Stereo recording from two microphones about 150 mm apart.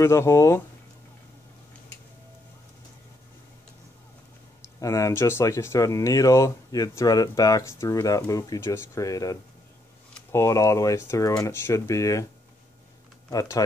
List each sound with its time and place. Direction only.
0.0 s speech: 20° left (ahead or behind)
4.7 s speech: 20° left (ahead or behind)
13.3 s speech: 25° left (ahead or behind)